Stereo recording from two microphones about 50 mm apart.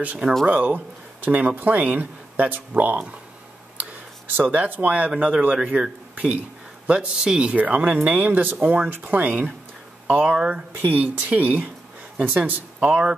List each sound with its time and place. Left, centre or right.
0.5 s speech: right
4.4 s speech: right
5.1 s speech: centre
6.1 s speech: right
7.5 s speech: right
10.4 s speech: right
10.8 s speech: right
12.8 s speech: right